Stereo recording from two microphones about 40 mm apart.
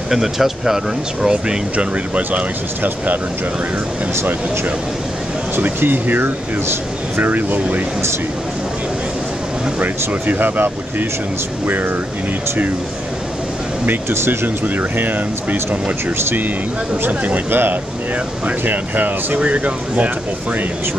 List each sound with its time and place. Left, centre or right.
0.1 s speech: centre
1.3 s speech: right
5.8 s speech: right
9.8 s speech: right
14.0 s speech: right
14.6 s speech: right
17.5 s speech: right
18.7 s speech: right
19.4 s speech: right